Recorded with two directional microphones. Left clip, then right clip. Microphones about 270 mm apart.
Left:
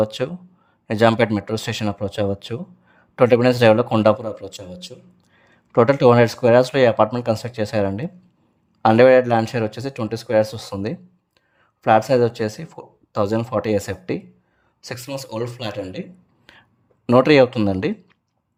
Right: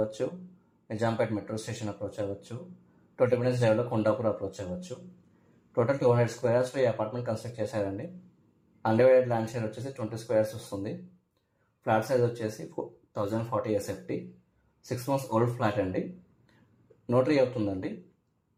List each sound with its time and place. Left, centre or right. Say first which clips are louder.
0.2 s a man's voice: left 7 dB; left
4.5 s speech: left 3 dB; centre
5.7 s speech: left 12 dB; left
15.1 s speech: even; left
17.1 s speech: left 12 dB; left